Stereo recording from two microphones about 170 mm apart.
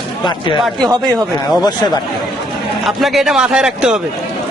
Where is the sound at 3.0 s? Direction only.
Centre (ahead or behind).